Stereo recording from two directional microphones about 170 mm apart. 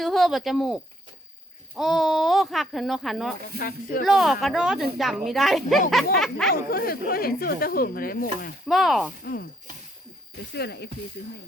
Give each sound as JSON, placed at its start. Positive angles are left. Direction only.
{"t": 0.0, "sound": "speech", "side_deg": 0}
{"t": 3.6, "sound": "speech", "side_deg": 60}
{"t": 4.0, "sound": "speech", "side_deg": 0}
{"t": 6.5, "sound": "speech", "side_deg": 60}
{"t": 8.6, "sound": "speech", "side_deg": 0}
{"t": 9.2, "sound": "speech", "side_deg": 65}
{"t": 10.5, "sound": "speech", "side_deg": 75}